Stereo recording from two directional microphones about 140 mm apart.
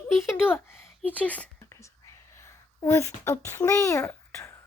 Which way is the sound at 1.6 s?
20° left (ahead or behind).